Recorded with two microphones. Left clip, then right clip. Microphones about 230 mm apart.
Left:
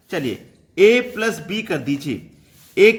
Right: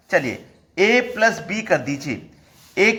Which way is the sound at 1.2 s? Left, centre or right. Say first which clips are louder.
Right 4 dB; left.